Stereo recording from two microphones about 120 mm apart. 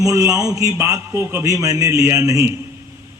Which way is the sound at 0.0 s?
25° right (ahead or behind).